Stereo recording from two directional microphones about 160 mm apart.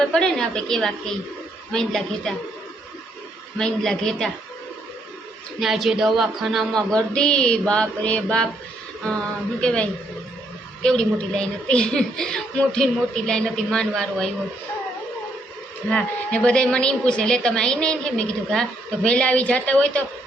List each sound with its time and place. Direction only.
0.0 s a woman's voice: 5° left (ahead or behind)
3.6 s a woman's voice: 5° left (ahead or behind)
5.5 s a woman's voice: centre (ahead or behind)
9.6 s a woman's voice: 5° left (ahead or behind)
15.9 s a woman's voice: 5° left (ahead or behind)